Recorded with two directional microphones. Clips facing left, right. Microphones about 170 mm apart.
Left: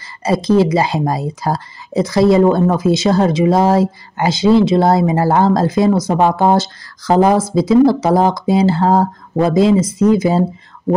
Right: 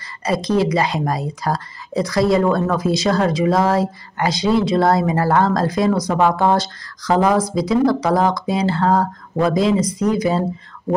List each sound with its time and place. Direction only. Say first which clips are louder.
0.2 s a woman's voice: left 5 dB; 25° left (ahead or behind)